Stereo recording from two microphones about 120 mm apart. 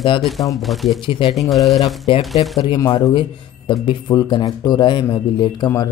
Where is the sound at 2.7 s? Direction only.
35° left (ahead or behind).